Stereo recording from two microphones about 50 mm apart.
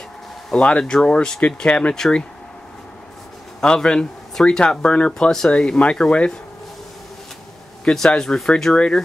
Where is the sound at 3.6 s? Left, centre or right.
Centre.